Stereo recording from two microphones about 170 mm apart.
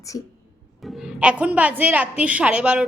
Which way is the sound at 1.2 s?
10° right (ahead or behind).